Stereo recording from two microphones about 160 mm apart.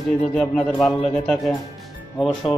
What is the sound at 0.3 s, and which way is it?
A man's voice, 5° left (ahead or behind).